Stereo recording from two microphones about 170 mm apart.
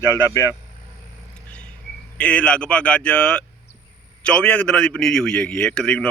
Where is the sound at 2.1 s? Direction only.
5° left (ahead or behind).